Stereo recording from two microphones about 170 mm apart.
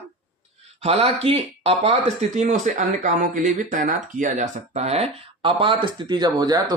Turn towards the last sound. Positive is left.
turn(degrees=-20)  # may be behind; listen again after turning